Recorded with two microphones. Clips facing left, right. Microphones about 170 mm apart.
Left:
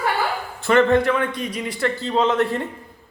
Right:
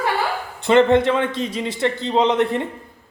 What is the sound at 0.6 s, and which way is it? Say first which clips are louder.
A man's voice: right 2 dB; 20° right (ahead or behind).